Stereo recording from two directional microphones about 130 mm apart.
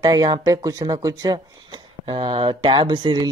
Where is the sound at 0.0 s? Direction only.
30° right (ahead or behind).